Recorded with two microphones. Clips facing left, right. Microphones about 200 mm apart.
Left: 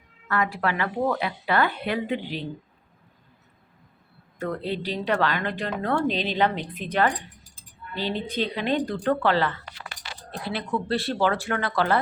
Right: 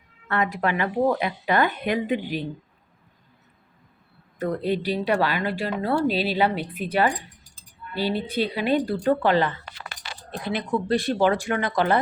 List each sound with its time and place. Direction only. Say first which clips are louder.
0.3 s speech: right 1 dB; 20° right (ahead or behind)
4.4 s speech: right 4 dB; 15° right (ahead or behind)